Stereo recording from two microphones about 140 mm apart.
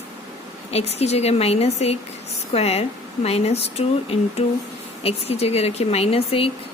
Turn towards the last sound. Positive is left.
turn(degrees=45)  # may be behind; listen again after turning